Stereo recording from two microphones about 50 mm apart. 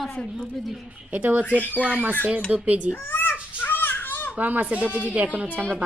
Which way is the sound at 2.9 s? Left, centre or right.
Left.